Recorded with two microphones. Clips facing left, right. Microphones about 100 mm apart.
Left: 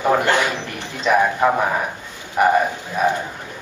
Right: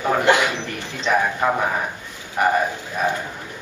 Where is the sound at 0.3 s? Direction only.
20° right (ahead or behind).